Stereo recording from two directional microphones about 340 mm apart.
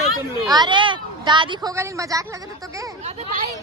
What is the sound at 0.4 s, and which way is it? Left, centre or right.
A woman's voice, centre.